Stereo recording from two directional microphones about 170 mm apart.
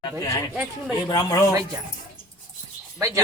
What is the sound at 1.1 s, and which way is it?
Speech, 20° left (ahead or behind).